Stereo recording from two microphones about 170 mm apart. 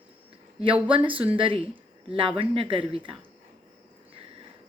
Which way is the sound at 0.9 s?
30° right (ahead or behind).